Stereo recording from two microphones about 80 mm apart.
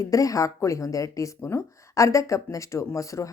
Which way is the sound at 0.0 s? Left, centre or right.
Left.